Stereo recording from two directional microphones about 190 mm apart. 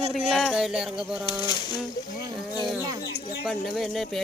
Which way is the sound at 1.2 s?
20° left (ahead or behind).